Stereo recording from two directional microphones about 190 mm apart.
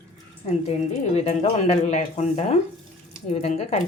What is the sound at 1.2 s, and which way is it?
A woman's voice, 35° left (ahead or behind).